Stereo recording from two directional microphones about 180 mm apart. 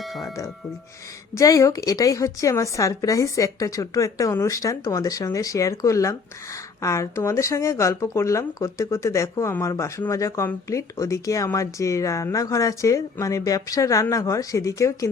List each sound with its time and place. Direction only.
0.0 s music: centre (ahead or behind)
1.4 s a woman's voice: 15° left (ahead or behind)